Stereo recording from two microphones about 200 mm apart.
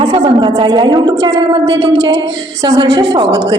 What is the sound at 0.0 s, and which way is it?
A woman's voice, 25° right (ahead or behind).